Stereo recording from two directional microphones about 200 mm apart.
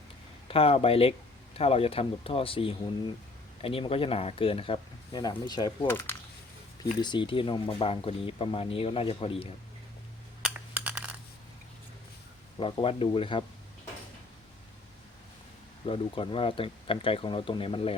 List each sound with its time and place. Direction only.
0.4 s speech: 30° left (ahead or behind)
7.0 s speech: 25° left (ahead or behind)
10.4 s a sound: 5° right (ahead or behind)
12.5 s speech: 25° left (ahead or behind)
15.9 s speech: 25° left (ahead or behind)